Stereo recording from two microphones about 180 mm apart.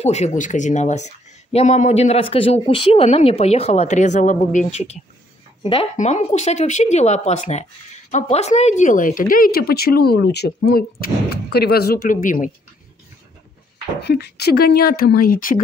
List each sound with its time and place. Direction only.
0.0 s speech: 40° left (ahead or behind)
14.0 s speech: 65° left (ahead or behind)